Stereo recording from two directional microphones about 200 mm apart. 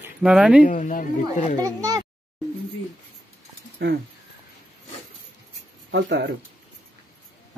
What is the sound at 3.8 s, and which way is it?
Speech, 50° right (ahead or behind).